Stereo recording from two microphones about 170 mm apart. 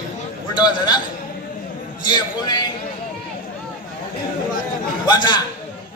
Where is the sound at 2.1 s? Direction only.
25° left (ahead or behind).